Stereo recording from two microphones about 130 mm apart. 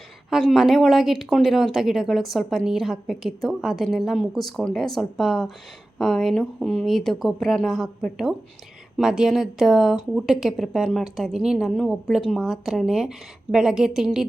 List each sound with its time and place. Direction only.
0.3 s speech: centre (ahead or behind)